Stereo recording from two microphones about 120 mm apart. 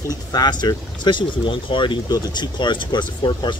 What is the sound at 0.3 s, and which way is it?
Speech, 35° left (ahead or behind).